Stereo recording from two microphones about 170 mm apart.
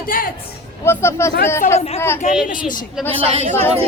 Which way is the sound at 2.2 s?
45° left (ahead or behind).